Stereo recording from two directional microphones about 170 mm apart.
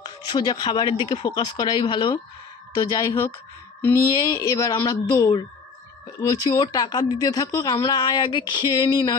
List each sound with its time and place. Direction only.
0.0 s speech: 25° left (ahead or behind)